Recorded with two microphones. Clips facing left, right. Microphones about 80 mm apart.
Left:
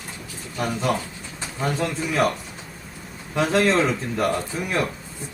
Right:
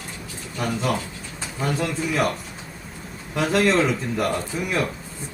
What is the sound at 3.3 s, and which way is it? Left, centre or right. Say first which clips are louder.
Speech: even; centre.